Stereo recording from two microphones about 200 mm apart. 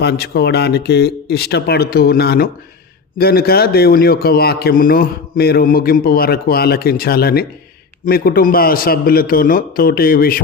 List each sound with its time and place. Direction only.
0.0 s a man's voice: 55° left (ahead or behind)